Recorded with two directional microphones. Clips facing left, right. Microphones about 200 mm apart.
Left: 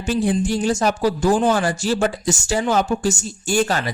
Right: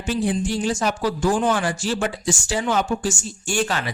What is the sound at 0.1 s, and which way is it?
Speech, 45° left (ahead or behind).